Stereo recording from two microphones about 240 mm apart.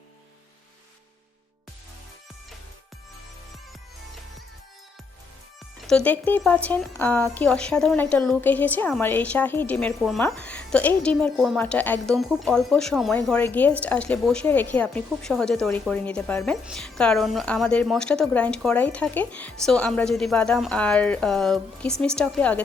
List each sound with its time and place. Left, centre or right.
5.9 s a woman's voice: centre